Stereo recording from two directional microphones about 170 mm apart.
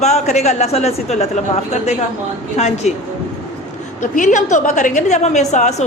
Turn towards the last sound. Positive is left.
turn(degrees=40)  # may be behind; listen again after turning